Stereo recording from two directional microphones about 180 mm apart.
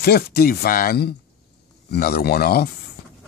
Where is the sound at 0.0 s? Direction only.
60° left (ahead or behind).